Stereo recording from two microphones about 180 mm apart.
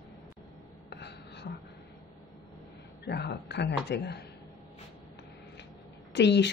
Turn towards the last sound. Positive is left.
turn(degrees=75)  # may be behind; listen again after turning